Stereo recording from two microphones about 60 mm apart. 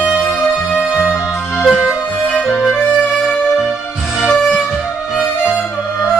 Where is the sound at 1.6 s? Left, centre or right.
Centre.